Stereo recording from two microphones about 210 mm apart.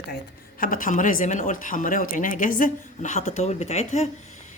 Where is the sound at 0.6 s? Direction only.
40° left (ahead or behind).